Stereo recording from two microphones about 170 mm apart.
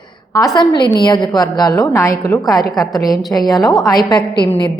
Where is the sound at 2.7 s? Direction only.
Centre (ahead or behind).